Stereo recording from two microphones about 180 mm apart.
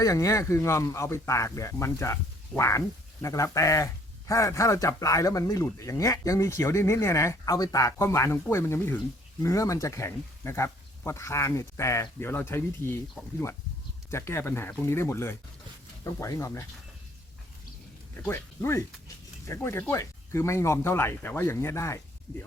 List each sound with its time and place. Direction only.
0.0 s speech: 20° left (ahead or behind)
14.1 s speech: 15° left (ahead or behind)
18.2 s speech: 10° left (ahead or behind)